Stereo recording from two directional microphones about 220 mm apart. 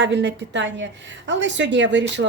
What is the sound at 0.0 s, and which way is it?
Speech, 55° right (ahead or behind).